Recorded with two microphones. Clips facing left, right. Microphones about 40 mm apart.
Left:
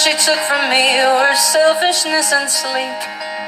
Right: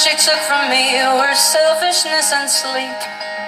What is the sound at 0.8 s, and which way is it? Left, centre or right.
Music, left.